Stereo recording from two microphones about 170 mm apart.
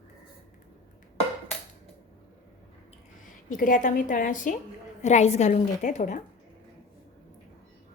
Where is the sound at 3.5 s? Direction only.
50° left (ahead or behind).